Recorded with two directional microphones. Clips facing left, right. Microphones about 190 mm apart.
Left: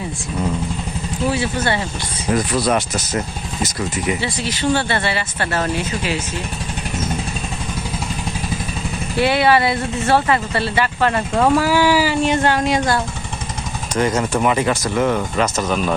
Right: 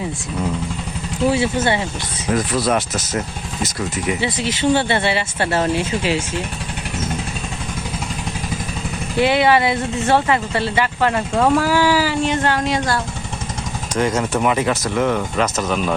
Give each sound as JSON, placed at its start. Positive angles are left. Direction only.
{"t": 1.3, "sound": "speech", "side_deg": -25}
{"t": 2.2, "sound": "speech", "side_deg": 0}
{"t": 4.2, "sound": "speech", "side_deg": -20}
{"t": 9.1, "sound": "speech", "side_deg": -15}
{"t": 11.3, "sound": "speech", "side_deg": 5}
{"t": 13.9, "sound": "speech", "side_deg": 0}